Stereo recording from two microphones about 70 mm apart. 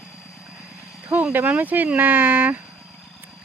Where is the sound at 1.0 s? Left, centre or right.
Right.